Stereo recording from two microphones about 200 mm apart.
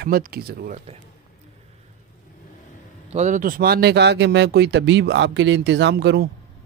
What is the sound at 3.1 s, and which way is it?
Speech, 35° right (ahead or behind).